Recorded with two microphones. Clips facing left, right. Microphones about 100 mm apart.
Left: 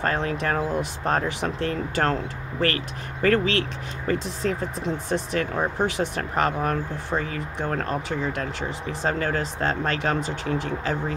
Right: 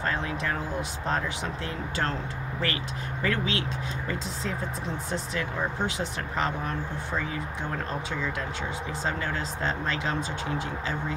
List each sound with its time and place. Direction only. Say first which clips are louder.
0.0 s speech: left 5 dB; 60° left (ahead or behind)